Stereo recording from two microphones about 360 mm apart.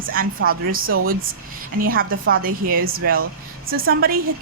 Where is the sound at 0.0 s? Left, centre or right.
Right.